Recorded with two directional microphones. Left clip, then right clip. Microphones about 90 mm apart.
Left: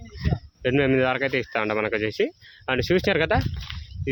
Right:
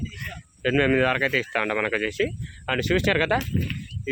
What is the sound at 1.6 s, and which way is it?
Speech, 35° left (ahead or behind).